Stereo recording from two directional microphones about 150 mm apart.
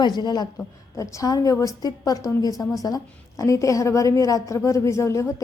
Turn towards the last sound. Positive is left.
turn(degrees=20)  # may be behind; listen again after turning